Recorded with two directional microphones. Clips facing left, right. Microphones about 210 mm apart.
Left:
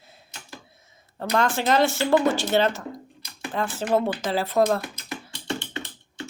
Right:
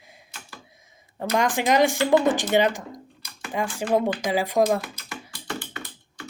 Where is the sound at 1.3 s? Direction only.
15° right (ahead or behind).